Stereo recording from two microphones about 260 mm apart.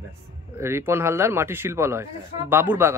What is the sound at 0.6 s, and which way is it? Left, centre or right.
Speech, centre.